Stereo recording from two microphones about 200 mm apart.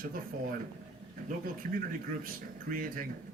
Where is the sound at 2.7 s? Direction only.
45° right (ahead or behind).